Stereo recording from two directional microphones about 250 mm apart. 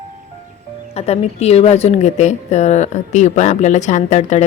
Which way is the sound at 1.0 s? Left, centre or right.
Left.